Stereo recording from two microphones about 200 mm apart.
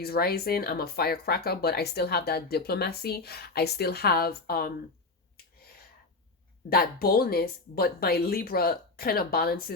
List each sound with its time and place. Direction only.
0.0 s speech: 50° left (ahead or behind)
6.7 s speech: 50° left (ahead or behind)